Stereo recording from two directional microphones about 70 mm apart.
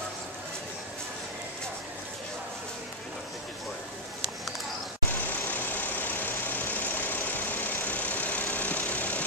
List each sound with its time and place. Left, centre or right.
5.1 s vehicle: left